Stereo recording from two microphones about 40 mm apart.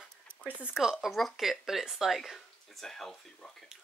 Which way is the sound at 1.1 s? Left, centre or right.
Centre.